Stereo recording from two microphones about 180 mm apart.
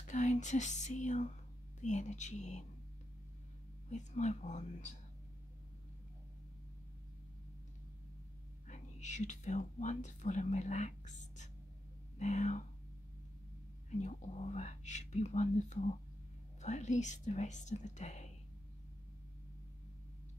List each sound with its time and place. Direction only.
0.0 s speech: 40° left (ahead or behind)
3.9 s speech: 40° left (ahead or behind)
8.6 s speech: 40° left (ahead or behind)
13.8 s speech: 40° left (ahead or behind)